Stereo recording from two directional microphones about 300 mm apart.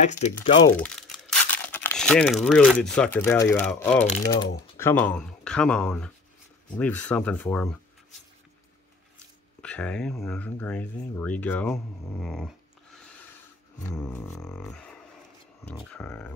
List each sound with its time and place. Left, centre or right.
0.0 s speech: left
0.3 s speech: centre
9.6 s speech: centre
13.8 s speech: centre